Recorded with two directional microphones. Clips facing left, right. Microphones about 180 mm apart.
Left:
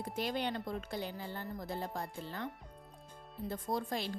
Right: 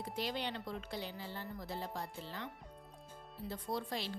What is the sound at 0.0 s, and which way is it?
A woman's voice, 50° left (ahead or behind).